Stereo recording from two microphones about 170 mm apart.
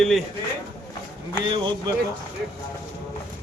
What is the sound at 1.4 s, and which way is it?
Speech, 30° right (ahead or behind).